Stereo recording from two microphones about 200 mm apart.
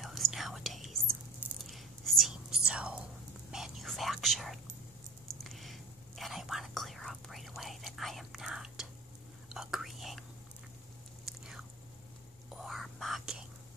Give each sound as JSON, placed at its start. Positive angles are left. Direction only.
{"t": 0.0, "sound": "whispering", "side_deg": 0}
{"t": 12.6, "sound": "whispering", "side_deg": 0}